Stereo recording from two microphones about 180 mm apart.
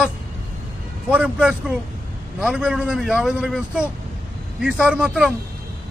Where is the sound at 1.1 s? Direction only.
5° right (ahead or behind).